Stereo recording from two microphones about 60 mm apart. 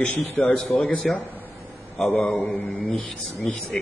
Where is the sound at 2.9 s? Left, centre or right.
Centre.